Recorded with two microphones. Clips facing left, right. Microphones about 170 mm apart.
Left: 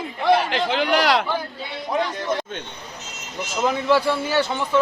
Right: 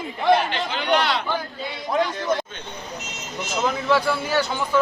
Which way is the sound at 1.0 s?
90° left.